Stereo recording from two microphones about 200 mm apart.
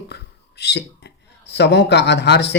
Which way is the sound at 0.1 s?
55° left (ahead or behind).